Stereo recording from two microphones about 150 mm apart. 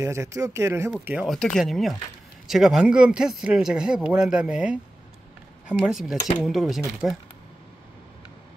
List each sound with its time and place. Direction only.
0.0 s speech: 20° right (ahead or behind)
1.3 s speech: centre (ahead or behind)